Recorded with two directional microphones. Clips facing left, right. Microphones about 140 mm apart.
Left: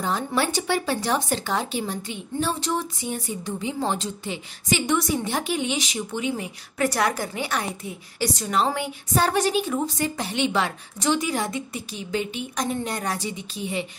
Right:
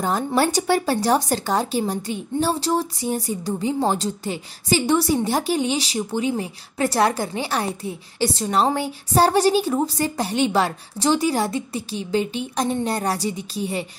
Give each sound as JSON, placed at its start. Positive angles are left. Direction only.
{"t": 0.0, "sound": "speech", "side_deg": -40}